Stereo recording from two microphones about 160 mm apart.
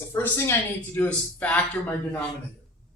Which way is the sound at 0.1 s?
15° left (ahead or behind).